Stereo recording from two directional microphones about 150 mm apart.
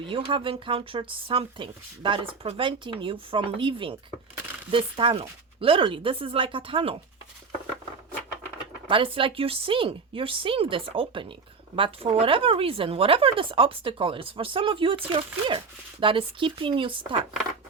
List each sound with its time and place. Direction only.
0.0 s speech: 35° right (ahead or behind)
8.9 s speech: 35° right (ahead or behind)